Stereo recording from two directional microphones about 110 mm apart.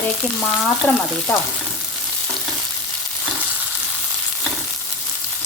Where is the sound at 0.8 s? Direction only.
15° left (ahead or behind).